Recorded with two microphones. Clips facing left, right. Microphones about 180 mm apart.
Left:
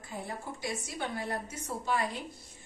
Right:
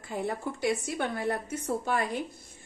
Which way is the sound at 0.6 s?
60° right (ahead or behind).